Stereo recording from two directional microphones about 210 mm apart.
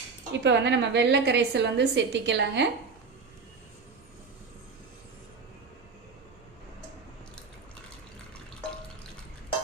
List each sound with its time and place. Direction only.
0.3 s a woman's voice: 55° right (ahead or behind)